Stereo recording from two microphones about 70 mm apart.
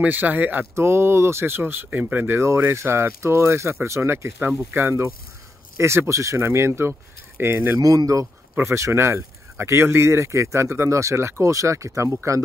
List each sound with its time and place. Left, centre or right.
0.0 s speech: right
0.7 s speech: right
7.8 s speech: right
8.6 s speech: right